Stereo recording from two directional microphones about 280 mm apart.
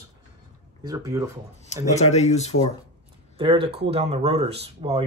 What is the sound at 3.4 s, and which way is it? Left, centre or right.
Speech, centre.